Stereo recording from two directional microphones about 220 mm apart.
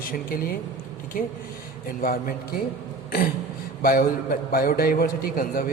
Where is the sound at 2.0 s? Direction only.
40° left (ahead or behind).